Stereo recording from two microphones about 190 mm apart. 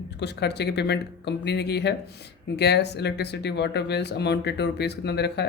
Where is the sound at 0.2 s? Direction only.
60° left (ahead or behind).